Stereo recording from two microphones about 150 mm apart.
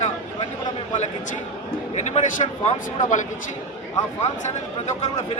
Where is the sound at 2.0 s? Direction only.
50° left (ahead or behind).